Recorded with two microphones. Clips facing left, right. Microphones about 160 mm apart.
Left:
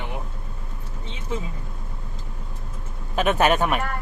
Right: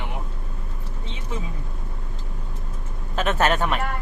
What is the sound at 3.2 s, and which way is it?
Speech, 15° left (ahead or behind).